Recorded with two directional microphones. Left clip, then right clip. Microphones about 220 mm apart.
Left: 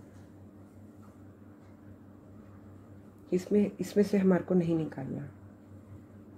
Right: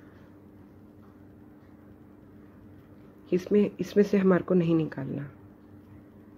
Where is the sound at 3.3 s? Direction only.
15° right (ahead or behind).